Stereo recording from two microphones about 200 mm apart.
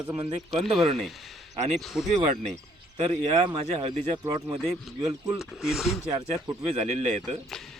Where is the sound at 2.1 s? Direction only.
35° right (ahead or behind).